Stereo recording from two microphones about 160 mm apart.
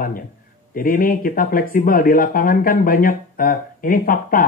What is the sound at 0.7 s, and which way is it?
Speech, 65° left (ahead or behind).